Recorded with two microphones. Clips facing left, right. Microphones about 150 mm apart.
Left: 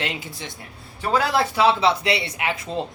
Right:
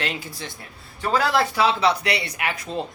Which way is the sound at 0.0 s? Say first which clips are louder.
Even; 20° left (ahead or behind).